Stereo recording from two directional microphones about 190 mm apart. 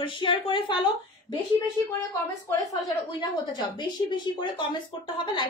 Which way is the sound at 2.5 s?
20° left (ahead or behind).